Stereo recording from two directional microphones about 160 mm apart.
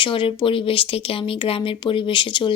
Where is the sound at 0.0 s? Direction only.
30° left (ahead or behind).